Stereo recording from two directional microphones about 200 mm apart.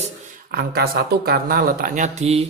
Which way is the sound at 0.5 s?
50° right (ahead or behind).